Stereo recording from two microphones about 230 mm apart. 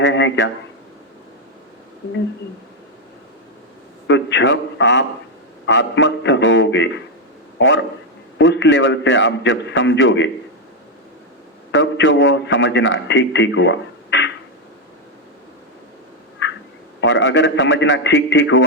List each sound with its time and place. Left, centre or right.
0.0 s a man's voice: left
4.0 s a man's voice: left
11.7 s a man's voice: left
16.4 s a sound: left
17.0 s a man's voice: left